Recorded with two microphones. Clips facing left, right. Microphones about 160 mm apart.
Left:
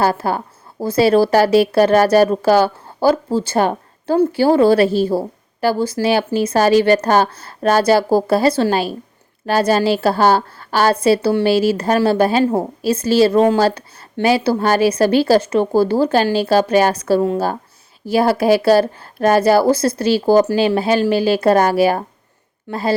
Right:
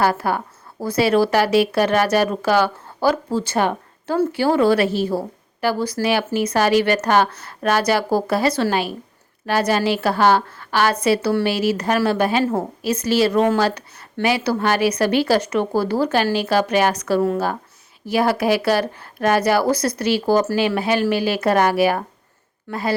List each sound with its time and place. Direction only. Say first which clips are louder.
0.0 s a woman's voice: left 2 dB; 25° left (ahead or behind)